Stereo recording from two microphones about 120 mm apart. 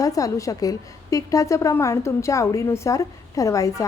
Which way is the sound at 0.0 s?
30° left (ahead or behind).